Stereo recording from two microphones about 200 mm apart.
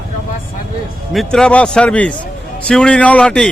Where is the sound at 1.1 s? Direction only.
5° left (ahead or behind).